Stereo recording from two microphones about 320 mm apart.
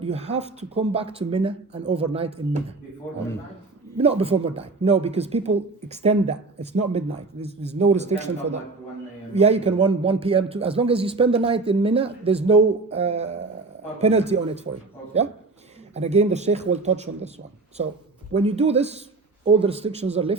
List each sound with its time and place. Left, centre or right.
0.0 s a man's voice: centre
3.9 s a man's voice: centre
9.3 s a man's voice: centre
16.0 s a man's voice: right
18.3 s a man's voice: centre